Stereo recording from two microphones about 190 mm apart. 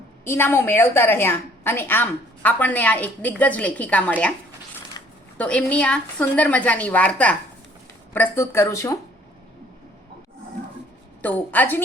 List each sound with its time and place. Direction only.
0.3 s a woman's voice: 10° left (ahead or behind)
5.4 s a woman's voice: 5° left (ahead or behind)
11.2 s a woman's voice: 10° left (ahead or behind)